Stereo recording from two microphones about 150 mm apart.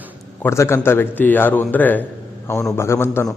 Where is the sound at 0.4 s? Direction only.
15° left (ahead or behind).